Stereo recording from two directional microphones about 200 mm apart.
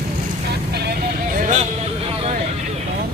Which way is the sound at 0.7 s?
50° right (ahead or behind).